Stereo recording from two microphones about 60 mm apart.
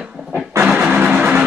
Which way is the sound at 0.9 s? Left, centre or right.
Right.